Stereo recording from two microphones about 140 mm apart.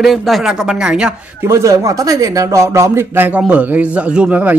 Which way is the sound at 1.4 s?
20° right (ahead or behind).